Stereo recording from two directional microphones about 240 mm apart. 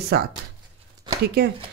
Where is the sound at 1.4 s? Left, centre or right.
Right.